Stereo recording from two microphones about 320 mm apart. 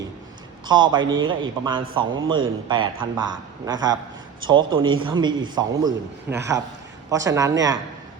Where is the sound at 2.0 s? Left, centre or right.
Right.